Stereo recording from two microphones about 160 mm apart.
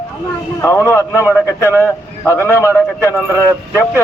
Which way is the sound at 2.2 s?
15° left (ahead or behind).